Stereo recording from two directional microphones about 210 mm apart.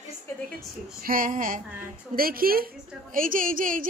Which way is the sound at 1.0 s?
40° right (ahead or behind).